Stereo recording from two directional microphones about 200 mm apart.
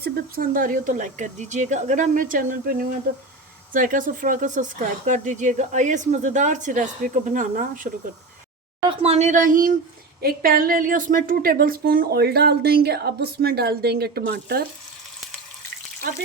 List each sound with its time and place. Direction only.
0.0 s speech: 45° right (ahead or behind)
8.9 s a woman's voice: 30° right (ahead or behind); by 14.7 s 50° right (ahead or behind)